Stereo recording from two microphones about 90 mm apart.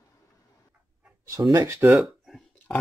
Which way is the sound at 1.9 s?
Centre (ahead or behind).